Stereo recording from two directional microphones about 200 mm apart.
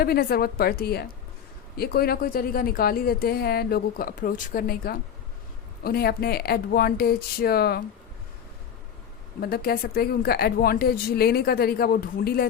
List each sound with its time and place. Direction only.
0.0 s speech: 50° left (ahead or behind)
9.4 s speech: 50° left (ahead or behind)